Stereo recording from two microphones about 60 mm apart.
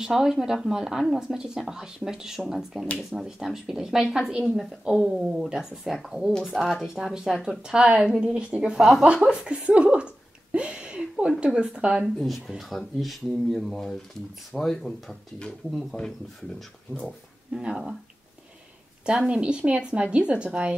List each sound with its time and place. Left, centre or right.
0.0 s speech: centre
12.3 s speech: centre
17.6 s speech: centre
19.0 s speech: centre